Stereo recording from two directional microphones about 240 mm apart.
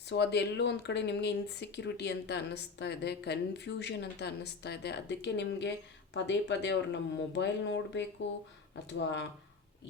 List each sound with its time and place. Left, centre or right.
0.1 s speech: left